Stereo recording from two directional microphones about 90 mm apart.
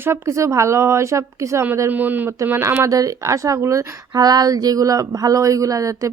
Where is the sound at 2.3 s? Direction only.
35° right (ahead or behind).